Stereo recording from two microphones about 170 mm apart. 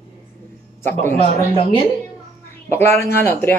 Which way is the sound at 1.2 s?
35° left (ahead or behind).